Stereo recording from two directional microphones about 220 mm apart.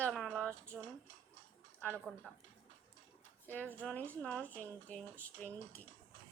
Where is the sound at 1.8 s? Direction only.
5° left (ahead or behind).